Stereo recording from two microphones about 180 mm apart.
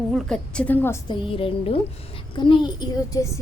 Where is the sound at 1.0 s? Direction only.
30° left (ahead or behind).